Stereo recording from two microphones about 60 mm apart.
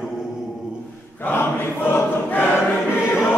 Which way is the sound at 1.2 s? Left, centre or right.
Left.